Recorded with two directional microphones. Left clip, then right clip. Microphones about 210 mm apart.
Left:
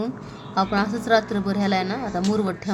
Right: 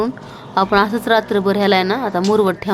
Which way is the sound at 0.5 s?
5° right (ahead or behind).